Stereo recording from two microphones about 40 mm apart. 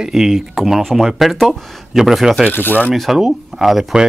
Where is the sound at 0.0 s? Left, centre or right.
Centre.